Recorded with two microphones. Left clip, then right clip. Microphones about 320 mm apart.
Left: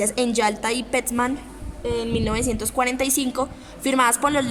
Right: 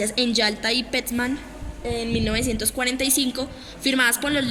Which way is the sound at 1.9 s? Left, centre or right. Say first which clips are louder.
Even; centre.